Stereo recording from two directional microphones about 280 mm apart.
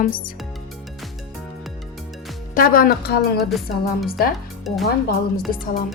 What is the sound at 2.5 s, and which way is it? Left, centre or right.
Speech, left.